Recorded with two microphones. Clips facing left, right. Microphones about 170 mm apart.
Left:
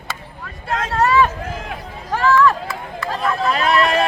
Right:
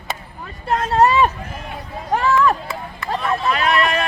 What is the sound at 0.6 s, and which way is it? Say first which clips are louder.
Vehicle: right 3 dB; 90° left.